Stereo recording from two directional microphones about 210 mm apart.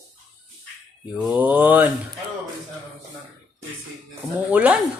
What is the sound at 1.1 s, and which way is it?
Mantra, 5° right (ahead or behind).